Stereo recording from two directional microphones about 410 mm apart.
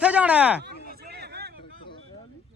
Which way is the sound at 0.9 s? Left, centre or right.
Right.